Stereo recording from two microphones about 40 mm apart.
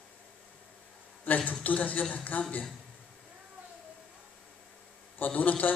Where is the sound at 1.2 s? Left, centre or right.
Left.